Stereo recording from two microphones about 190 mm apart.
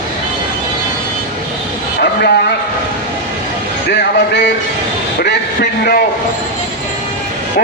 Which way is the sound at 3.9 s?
65° left (ahead or behind).